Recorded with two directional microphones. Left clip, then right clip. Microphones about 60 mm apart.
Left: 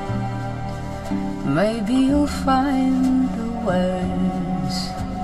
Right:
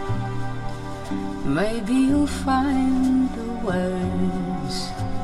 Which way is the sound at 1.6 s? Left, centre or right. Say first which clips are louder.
Left 3 dB; left.